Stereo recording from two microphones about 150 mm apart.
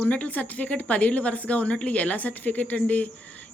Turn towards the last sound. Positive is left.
turn(degrees=10)  # may be behind; listen again after turning